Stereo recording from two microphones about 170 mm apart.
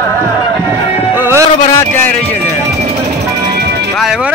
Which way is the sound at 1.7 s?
15° left (ahead or behind).